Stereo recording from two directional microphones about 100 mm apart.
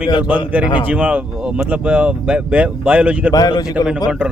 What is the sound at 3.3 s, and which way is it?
Speech, 40° left (ahead or behind).